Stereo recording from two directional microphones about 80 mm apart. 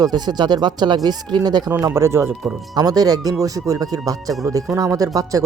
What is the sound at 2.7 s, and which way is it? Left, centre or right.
Speech, right.